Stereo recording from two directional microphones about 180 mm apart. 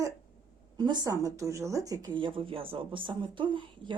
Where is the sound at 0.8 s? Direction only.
25° right (ahead or behind).